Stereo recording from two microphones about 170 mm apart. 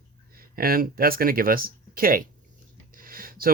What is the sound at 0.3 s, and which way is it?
Speech, 60° right (ahead or behind).